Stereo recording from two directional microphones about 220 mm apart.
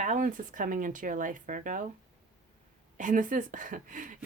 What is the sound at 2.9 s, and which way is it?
Speech, 35° right (ahead or behind).